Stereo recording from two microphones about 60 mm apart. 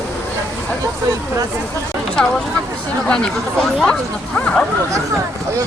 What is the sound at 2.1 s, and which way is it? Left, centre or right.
Speech, centre.